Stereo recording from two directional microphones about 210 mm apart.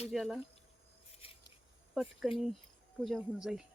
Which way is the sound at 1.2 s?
25° left (ahead or behind).